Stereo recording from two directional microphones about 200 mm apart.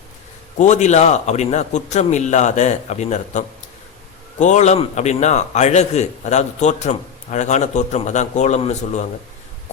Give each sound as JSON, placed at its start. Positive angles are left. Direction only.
{"t": 0.6, "sound": "a man's voice", "side_deg": 35}